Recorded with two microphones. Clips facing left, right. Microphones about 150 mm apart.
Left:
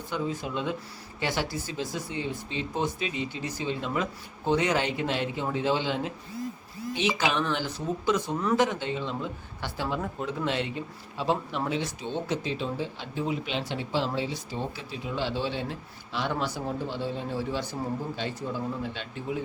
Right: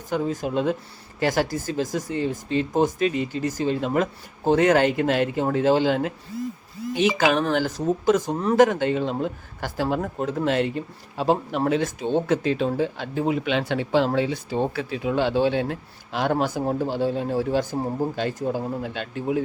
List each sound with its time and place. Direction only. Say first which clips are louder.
0.1 s speech: right 7 dB; 45° right (ahead or behind)
7.2 s speech: right 7 dB; 45° right (ahead or behind)
8.5 s speech: right 10 dB; 50° right (ahead or behind)